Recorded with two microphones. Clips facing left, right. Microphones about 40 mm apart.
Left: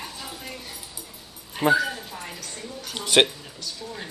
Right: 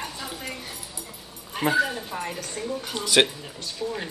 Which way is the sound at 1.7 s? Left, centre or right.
Right.